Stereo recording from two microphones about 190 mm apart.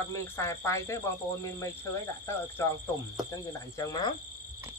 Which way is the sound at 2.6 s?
15° left (ahead or behind).